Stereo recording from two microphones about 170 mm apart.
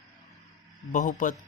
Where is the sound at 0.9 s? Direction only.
50° left (ahead or behind).